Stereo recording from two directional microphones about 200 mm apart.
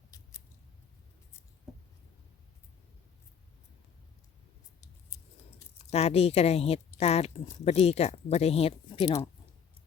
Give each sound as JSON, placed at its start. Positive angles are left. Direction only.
{"t": 5.9, "sound": "speech", "side_deg": 30}